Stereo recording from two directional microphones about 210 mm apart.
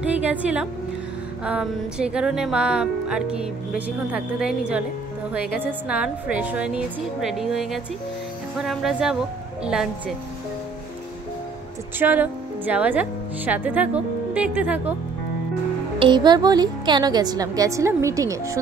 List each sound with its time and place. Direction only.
0.0 s speech: 5° right (ahead or behind)
12.0 s speech: 10° right (ahead or behind)
16.0 s a woman's voice: 20° right (ahead or behind)